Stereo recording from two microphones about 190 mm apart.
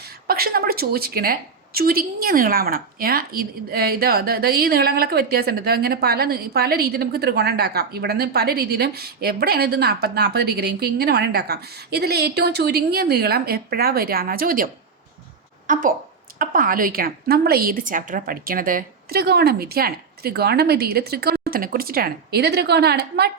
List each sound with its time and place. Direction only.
0.3 s a woman's voice: 50° right (ahead or behind)